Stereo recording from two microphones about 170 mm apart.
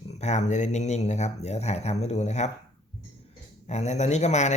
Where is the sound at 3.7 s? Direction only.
40° left (ahead or behind).